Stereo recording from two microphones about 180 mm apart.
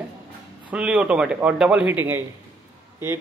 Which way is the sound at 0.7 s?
5° right (ahead or behind).